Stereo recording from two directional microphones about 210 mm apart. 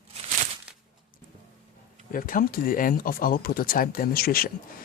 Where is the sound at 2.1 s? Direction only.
40° left (ahead or behind).